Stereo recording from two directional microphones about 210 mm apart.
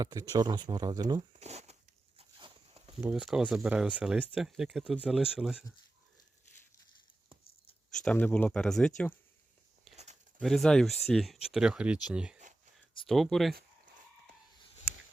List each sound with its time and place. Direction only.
0.0 s speech: 15° right (ahead or behind)
1.3 s speech: 30° right (ahead or behind)
2.1 s a sound: 30° right (ahead or behind)
3.0 s speech: 5° right (ahead or behind)
7.9 s speech: 5° left (ahead or behind)
9.9 s a sound: 30° right (ahead or behind)
10.4 s speech: centre (ahead or behind)